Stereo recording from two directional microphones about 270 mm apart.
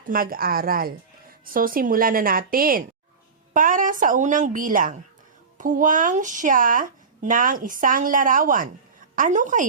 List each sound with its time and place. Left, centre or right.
0.0 s a woman's voice: right